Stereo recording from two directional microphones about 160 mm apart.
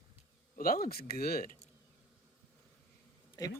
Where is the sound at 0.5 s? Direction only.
60° left (ahead or behind).